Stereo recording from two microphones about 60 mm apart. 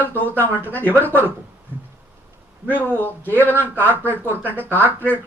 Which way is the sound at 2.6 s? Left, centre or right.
Left.